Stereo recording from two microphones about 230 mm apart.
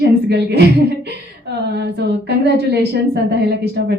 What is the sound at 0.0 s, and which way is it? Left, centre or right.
A woman's voice, right.